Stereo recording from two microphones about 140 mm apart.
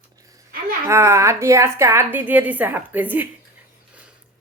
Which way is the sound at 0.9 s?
20° right (ahead or behind).